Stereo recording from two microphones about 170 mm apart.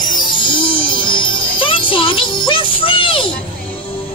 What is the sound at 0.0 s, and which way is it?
Music, 25° left (ahead or behind).